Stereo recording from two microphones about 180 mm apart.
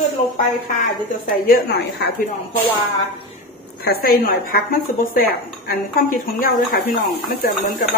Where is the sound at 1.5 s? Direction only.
70° left (ahead or behind).